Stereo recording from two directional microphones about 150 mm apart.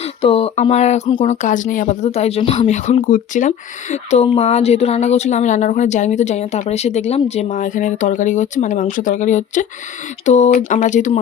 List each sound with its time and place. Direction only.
0.2 s speech: 40° left (ahead or behind)